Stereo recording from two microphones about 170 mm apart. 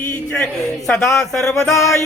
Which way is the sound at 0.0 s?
10° left (ahead or behind).